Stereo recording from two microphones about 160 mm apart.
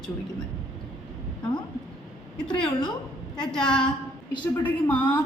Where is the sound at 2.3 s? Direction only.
5° left (ahead or behind).